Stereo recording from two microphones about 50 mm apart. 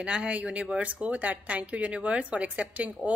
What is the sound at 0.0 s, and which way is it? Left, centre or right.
Speech, right.